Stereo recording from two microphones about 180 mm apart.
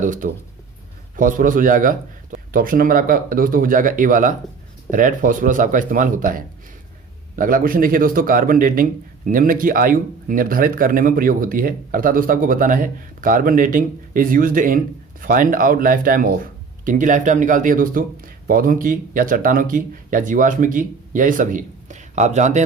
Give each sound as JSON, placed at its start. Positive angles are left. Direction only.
{"t": 0.0, "sound": "a man's voice", "side_deg": -45}